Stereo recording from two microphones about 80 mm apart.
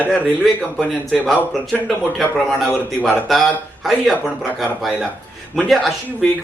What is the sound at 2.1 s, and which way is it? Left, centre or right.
Speech, centre.